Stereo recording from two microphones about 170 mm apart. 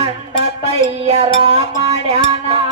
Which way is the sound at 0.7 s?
35° right (ahead or behind).